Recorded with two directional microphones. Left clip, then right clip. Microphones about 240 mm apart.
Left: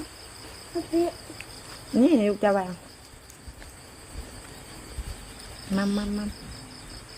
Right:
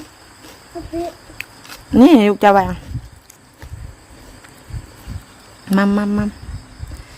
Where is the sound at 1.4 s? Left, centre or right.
Right.